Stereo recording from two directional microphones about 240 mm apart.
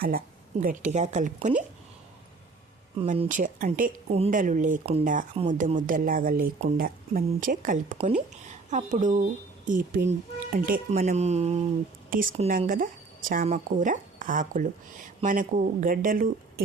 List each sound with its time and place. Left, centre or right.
0.6 s speech: right
3.0 s speech: right